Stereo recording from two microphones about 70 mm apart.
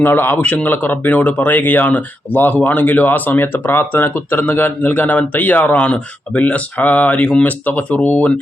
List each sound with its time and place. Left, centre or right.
0.0 s speech: left